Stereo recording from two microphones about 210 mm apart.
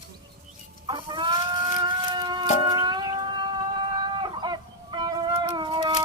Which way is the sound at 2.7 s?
20° right (ahead or behind).